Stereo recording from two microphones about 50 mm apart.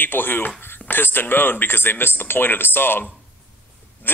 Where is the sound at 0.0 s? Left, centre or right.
Left.